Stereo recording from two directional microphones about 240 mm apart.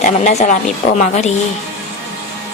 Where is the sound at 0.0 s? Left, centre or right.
Left.